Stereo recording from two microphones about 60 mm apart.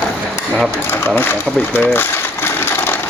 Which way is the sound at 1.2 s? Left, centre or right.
Left.